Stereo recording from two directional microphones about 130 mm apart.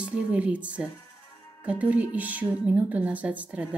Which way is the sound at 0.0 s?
10° right (ahead or behind).